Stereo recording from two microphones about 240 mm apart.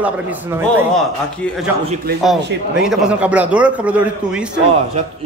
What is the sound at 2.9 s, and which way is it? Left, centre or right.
A man's voice, centre.